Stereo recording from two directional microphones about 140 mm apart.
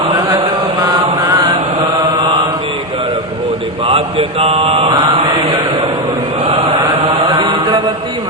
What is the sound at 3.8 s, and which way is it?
Mantra, 40° right (ahead or behind).